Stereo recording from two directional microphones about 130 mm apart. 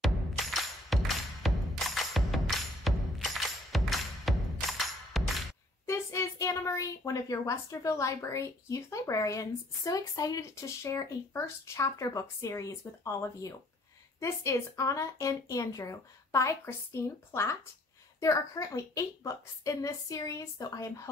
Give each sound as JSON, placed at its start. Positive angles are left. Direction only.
{"t": 0.0, "sound": "music", "side_deg": 0}
{"t": 5.9, "sound": "a woman's voice", "side_deg": 20}